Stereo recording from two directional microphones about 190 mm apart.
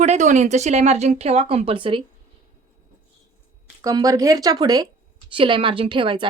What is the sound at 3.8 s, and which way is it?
A woman's voice, 20° right (ahead or behind).